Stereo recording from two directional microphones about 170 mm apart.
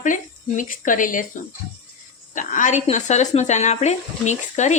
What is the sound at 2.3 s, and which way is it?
Speech, 50° left (ahead or behind).